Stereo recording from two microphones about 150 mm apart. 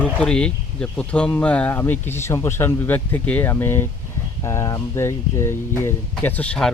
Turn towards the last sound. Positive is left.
turn(degrees=10)  # may be behind; listen again after turning